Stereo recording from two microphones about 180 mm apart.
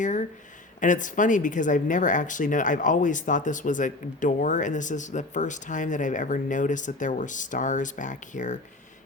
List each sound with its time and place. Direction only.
0.0 s speech: 45° left (ahead or behind)